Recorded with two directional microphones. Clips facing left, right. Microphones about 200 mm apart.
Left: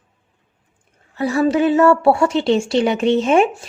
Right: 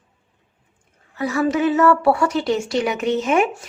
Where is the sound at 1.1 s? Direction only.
30° left (ahead or behind).